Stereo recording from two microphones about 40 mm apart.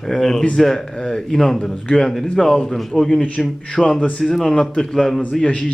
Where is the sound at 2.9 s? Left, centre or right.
Centre.